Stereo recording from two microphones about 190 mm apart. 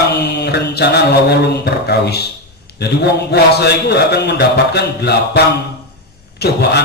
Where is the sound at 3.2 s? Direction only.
60° left (ahead or behind).